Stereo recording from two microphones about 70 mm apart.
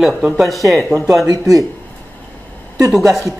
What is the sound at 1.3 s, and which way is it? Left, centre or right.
Speech, right.